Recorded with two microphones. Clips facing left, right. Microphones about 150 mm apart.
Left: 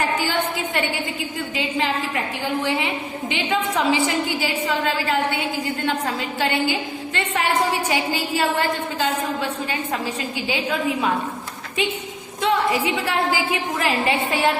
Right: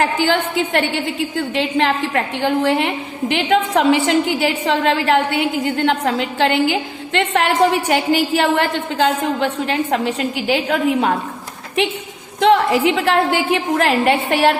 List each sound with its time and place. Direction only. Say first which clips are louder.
0.0 s a woman's voice: right 5 dB; 80° right
12.4 s a sound: right 8 dB; 90° right
12.7 s a woman's voice: right 7 dB; 90° right
13.7 s a woman's voice: right 5 dB; 65° right (ahead or behind)